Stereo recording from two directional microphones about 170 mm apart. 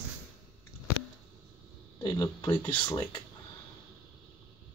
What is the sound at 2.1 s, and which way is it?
Speech, 20° left (ahead or behind).